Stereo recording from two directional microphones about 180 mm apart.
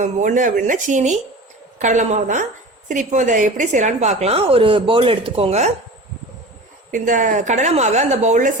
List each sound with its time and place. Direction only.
0.0 s speech: 45° right (ahead or behind)
6.9 s speech: 45° right (ahead or behind)